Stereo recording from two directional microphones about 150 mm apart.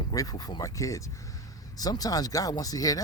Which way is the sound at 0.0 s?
25° left (ahead or behind).